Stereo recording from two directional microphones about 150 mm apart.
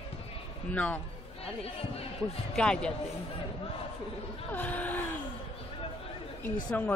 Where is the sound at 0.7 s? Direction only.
10° left (ahead or behind).